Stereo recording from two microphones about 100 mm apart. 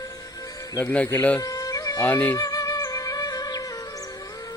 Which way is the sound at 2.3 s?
40° left (ahead or behind).